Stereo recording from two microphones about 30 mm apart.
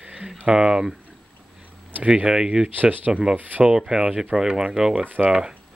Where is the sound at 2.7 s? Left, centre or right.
Right.